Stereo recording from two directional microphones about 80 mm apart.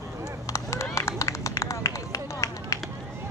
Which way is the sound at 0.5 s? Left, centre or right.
Left.